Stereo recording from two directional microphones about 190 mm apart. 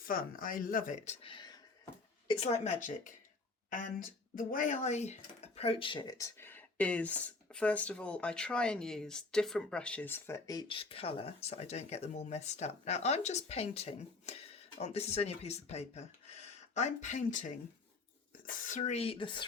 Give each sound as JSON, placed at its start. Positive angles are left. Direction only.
{"t": 0.0, "sound": "speech", "side_deg": 50}
{"t": 1.2, "sound": "speech", "side_deg": 25}